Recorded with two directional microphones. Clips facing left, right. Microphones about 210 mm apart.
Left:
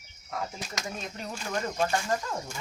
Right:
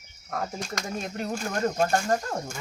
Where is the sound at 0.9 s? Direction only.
50° right (ahead or behind).